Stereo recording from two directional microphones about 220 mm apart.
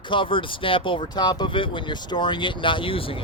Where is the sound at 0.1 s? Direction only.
20° left (ahead or behind).